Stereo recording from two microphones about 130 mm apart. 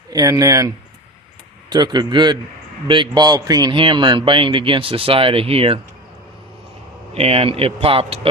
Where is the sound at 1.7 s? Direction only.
35° right (ahead or behind).